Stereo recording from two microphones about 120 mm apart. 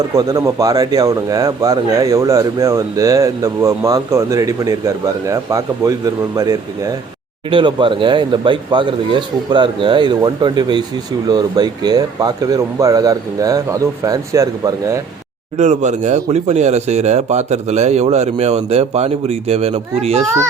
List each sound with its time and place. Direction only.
0.1 s speech: 30° right (ahead or behind)
7.5 s speech: 45° right (ahead or behind); by 15.0 s 25° right (ahead or behind)
15.5 s speech: 75° right (ahead or behind); by 20.2 s 60° right (ahead or behind)